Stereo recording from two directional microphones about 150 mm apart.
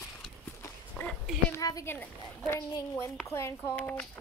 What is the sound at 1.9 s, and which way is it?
Speech, 15° left (ahead or behind).